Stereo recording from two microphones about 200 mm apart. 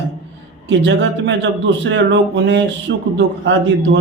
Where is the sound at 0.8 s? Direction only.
60° right (ahead or behind).